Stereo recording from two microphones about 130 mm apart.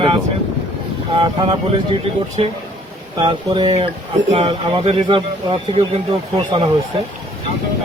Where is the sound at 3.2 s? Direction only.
35° right (ahead or behind).